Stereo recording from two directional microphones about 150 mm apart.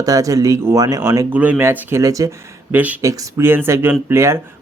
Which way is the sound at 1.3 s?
10° right (ahead or behind).